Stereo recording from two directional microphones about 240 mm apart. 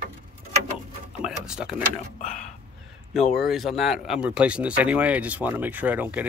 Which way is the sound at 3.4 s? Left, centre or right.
Centre.